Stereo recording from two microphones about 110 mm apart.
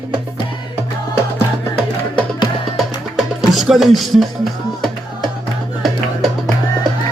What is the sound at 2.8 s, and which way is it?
Music, centre (ahead or behind).